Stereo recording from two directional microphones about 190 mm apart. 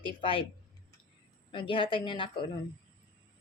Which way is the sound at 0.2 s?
25° left (ahead or behind).